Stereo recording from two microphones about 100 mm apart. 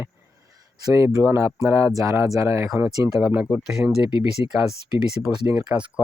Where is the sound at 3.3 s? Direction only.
15° right (ahead or behind).